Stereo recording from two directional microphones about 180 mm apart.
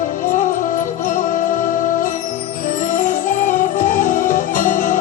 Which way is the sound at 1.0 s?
45° left (ahead or behind).